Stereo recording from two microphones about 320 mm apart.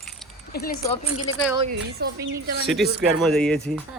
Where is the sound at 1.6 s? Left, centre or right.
Right.